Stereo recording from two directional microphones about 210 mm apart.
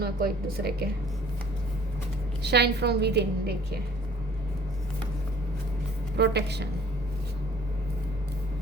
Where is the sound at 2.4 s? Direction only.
50° right (ahead or behind).